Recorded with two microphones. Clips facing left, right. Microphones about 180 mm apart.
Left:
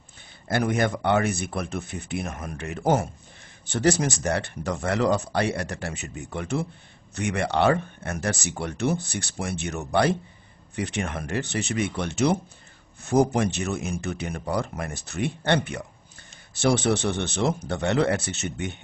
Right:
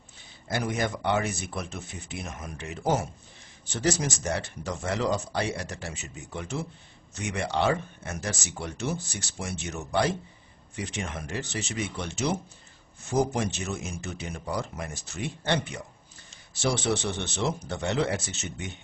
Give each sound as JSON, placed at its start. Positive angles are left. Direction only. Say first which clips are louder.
{"t": 0.5, "sound": "speech", "louder": "left 5 dB", "side_deg": 60}